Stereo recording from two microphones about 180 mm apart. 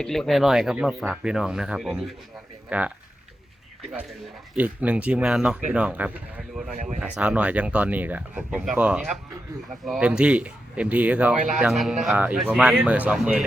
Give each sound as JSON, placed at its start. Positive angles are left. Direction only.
{"t": 0.0, "sound": "speech", "side_deg": 0}
{"t": 4.5, "sound": "speech", "side_deg": -10}
{"t": 11.3, "sound": "speech", "side_deg": -40}
{"t": 11.6, "sound": "speech", "side_deg": 0}